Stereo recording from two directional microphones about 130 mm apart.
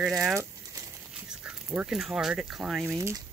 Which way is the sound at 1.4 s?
5° right (ahead or behind).